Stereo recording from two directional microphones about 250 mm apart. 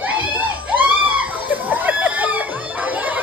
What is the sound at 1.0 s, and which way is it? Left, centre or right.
Chicken, centre.